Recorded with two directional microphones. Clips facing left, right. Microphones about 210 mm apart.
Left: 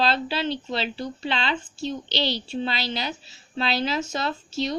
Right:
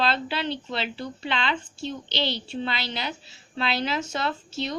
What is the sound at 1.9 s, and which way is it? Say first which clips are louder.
Speech: left 2 dB; 55° right (ahead or behind).